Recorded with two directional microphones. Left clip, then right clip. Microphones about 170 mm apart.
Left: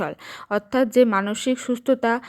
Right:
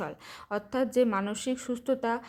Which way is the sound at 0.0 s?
30° left (ahead or behind).